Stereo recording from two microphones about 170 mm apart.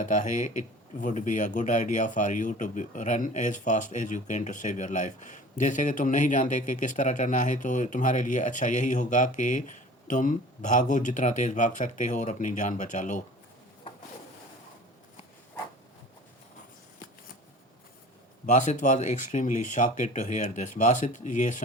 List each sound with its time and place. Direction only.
0.0 s speech: 50° left (ahead or behind)
18.4 s speech: 45° left (ahead or behind)